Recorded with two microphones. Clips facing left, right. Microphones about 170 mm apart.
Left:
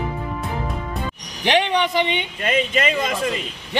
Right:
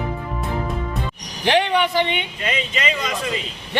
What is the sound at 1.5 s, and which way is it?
Speech, 20° left (ahead or behind).